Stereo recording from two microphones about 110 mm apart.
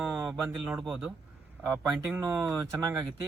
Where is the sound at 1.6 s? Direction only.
20° right (ahead or behind).